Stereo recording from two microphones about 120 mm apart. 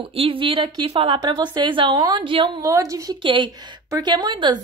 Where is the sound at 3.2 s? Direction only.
45° right (ahead or behind).